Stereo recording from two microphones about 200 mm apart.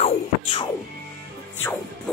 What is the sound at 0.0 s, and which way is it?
Music, 30° left (ahead or behind).